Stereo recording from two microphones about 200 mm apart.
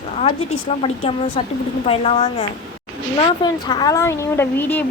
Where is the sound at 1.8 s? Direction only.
30° left (ahead or behind).